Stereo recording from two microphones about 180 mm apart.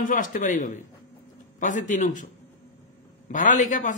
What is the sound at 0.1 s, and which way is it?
A man's voice, 45° left (ahead or behind).